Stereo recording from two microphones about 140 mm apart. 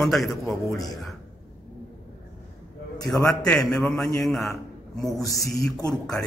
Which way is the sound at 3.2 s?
25° left (ahead or behind).